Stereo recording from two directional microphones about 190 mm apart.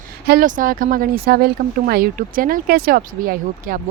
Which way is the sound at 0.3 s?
45° right (ahead or behind).